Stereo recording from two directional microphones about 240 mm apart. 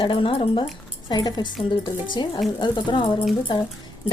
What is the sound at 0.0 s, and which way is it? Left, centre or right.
Speech, left.